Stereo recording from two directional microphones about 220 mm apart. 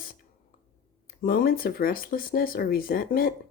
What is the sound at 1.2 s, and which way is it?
Speech, 40° left (ahead or behind).